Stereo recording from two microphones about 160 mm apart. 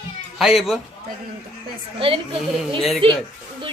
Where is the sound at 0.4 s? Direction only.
Centre (ahead or behind).